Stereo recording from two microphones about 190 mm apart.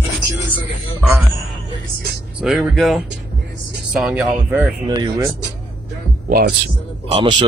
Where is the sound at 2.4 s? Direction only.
5° right (ahead or behind).